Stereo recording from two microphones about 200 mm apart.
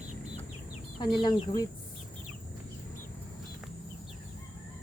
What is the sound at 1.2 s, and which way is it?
Speech, 20° left (ahead or behind).